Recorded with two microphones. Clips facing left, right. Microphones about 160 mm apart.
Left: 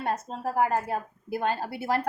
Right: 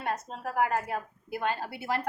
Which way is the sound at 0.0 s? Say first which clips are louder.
Left 4 dB; 35° left (ahead or behind).